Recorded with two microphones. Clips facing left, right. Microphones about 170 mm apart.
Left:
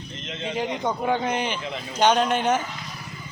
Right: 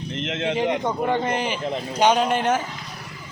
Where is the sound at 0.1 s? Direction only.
75° right (ahead or behind).